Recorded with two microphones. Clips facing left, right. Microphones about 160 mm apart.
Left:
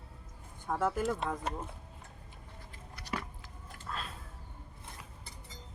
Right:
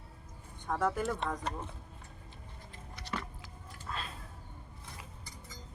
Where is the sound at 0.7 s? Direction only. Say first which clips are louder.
Left 1 dB; 5° left (ahead or behind).